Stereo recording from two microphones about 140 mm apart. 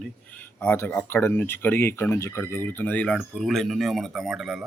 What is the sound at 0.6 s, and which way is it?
Speech, 15° left (ahead or behind).